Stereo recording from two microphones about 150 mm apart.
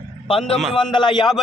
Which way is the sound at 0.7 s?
30° left (ahead or behind).